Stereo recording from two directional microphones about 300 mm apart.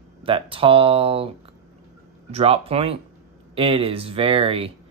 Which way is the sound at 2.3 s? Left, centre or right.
Centre.